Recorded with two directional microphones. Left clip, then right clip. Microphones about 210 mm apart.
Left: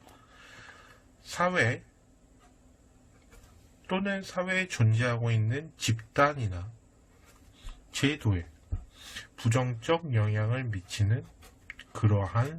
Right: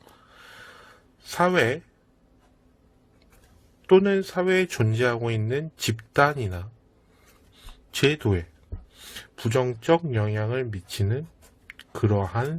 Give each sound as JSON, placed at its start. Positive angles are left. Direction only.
{"t": 1.4, "sound": "speech", "side_deg": -55}
{"t": 3.8, "sound": "speech", "side_deg": -50}
{"t": 7.7, "sound": "speech", "side_deg": -50}